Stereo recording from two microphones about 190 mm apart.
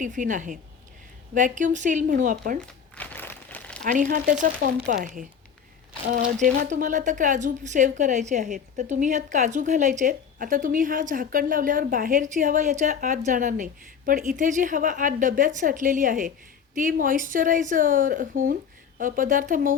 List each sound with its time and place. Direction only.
0.0 s a woman's voice: 40° right (ahead or behind)
2.9 s crumpling: 10° left (ahead or behind)
3.8 s a woman's voice: 45° right (ahead or behind)